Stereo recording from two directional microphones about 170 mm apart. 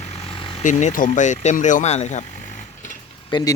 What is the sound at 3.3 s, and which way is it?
Speech, 30° left (ahead or behind).